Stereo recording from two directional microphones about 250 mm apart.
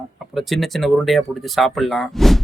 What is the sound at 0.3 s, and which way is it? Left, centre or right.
Speech, centre.